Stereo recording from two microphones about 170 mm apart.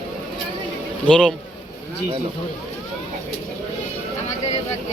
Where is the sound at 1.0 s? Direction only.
5° left (ahead or behind).